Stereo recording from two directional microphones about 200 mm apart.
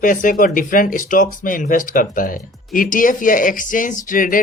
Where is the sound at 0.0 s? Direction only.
40° left (ahead or behind).